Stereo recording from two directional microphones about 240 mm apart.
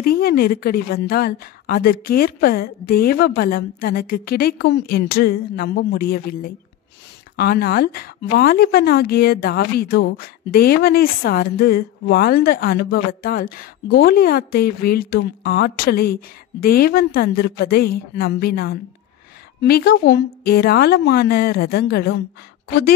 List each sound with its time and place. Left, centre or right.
0.0 s speech: left